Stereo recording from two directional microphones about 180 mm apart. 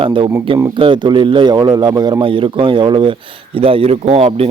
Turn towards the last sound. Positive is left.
turn(degrees=-35)  # may be behind; listen again after turning